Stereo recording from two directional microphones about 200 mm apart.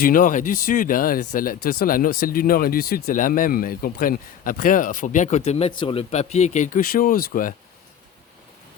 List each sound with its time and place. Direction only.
0.0 s speech: 45° left (ahead or behind)